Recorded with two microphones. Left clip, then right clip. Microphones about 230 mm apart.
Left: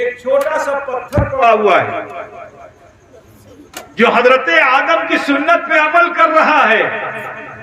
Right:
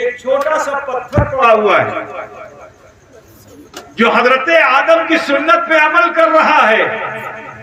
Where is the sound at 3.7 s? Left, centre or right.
Left.